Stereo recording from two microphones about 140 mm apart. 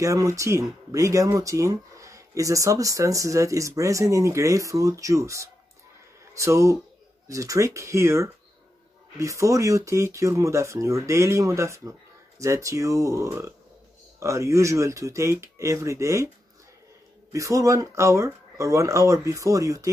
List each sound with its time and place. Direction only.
0.0 s speech: 20° right (ahead or behind)
17.3 s speech: 20° right (ahead or behind)